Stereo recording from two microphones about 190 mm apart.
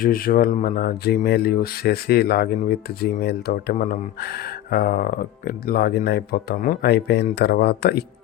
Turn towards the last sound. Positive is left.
turn(degrees=55)  # may be behind; listen again after turning